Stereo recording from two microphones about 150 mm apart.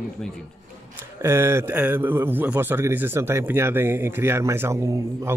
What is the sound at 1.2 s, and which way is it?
A man's voice, 15° right (ahead or behind).